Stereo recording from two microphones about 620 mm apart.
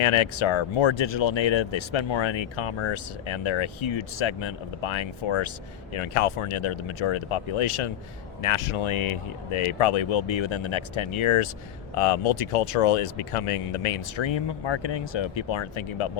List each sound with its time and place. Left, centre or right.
0.0 s speech: left